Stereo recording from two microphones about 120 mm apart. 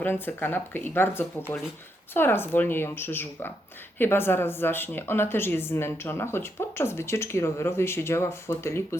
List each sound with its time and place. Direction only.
0.0 s speech: 15° left (ahead or behind)